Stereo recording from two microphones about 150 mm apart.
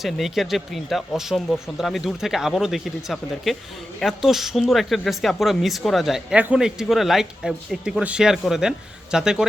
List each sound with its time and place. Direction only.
0.0 s speech: centre (ahead or behind)